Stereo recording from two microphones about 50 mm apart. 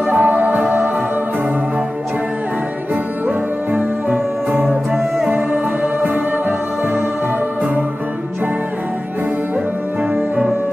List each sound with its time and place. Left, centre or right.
0.0 s music: right
3.7 s music: right